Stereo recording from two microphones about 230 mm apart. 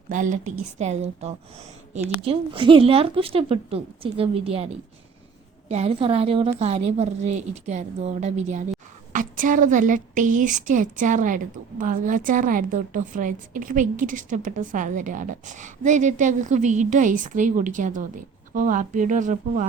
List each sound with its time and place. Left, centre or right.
0.1 s a woman's voice: right